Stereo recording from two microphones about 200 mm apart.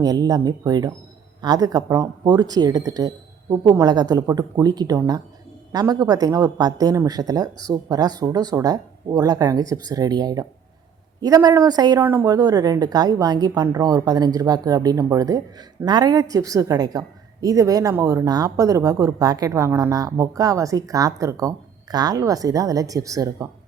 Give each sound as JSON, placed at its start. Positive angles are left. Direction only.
{"t": 0.0, "sound": "a woman's voice", "side_deg": -20}